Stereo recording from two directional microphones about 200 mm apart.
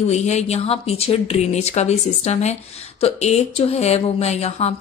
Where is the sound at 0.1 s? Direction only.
35° left (ahead or behind).